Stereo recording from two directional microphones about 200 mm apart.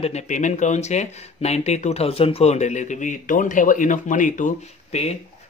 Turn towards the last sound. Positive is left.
turn(degrees=35)  # may be behind; listen again after turning